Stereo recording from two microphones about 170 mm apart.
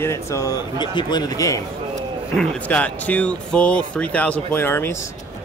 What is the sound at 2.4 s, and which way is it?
Speech, 10° left (ahead or behind).